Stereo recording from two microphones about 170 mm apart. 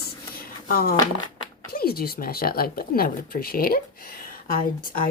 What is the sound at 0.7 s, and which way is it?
A woman's voice, 60° left (ahead or behind).